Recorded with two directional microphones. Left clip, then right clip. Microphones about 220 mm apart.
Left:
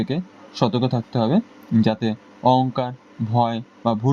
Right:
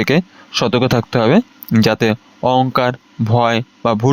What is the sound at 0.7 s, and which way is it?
Speech, 50° right (ahead or behind).